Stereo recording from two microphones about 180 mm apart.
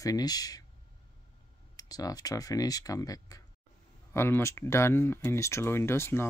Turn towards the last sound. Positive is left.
turn(degrees=15)  # may be behind; listen again after turning